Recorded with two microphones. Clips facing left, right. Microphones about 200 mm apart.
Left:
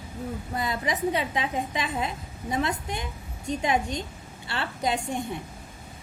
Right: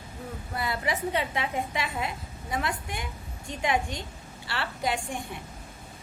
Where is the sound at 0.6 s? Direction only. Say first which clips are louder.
Left 1 dB; 20° left (ahead or behind).